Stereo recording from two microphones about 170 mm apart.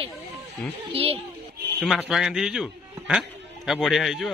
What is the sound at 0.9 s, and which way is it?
Speech, 35° right (ahead or behind).